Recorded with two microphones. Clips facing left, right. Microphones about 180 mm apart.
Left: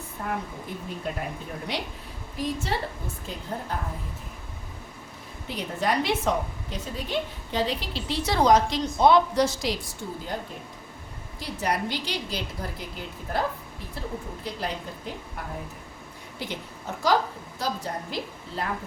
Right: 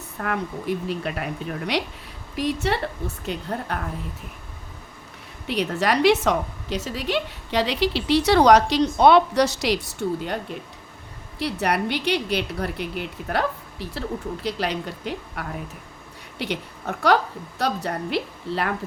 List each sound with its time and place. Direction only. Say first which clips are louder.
0.2 s a woman's voice: right 5 dB; 75° right (ahead or behind)
5.5 s a woman's voice: right 5 dB; 75° right (ahead or behind)